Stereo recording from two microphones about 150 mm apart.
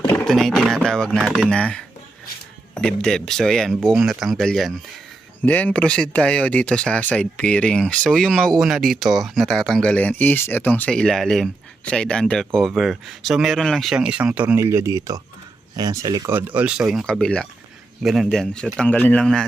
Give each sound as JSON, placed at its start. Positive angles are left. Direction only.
{"t": 0.1, "sound": "speech", "side_deg": 0}
{"t": 16.4, "sound": "speech", "side_deg": -10}